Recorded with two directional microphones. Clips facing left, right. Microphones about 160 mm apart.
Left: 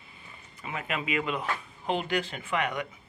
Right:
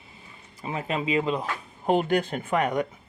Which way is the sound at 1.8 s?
45° right (ahead or behind).